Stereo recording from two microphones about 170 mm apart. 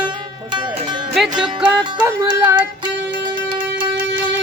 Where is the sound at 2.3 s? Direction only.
25° right (ahead or behind).